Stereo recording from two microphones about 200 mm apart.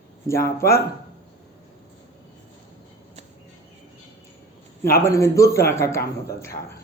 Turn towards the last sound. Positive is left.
turn(degrees=15)  # may be behind; listen again after turning